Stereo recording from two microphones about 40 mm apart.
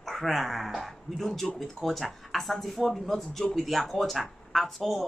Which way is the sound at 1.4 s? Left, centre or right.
Centre.